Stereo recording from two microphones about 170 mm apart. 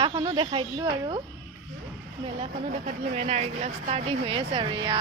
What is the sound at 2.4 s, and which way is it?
Speech, 40° right (ahead or behind).